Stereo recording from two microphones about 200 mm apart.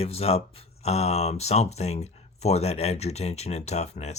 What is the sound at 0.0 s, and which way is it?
Speech, 30° left (ahead or behind).